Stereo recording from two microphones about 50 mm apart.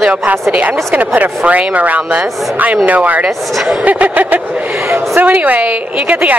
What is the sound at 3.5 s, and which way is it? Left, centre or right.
Speech, centre.